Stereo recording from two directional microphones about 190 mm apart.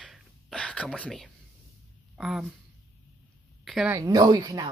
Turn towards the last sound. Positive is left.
turn(degrees=-20)  # may be behind; listen again after turning